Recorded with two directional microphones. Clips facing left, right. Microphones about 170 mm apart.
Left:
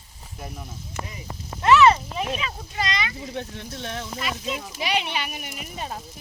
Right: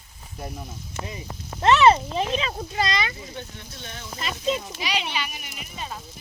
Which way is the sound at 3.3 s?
85° left.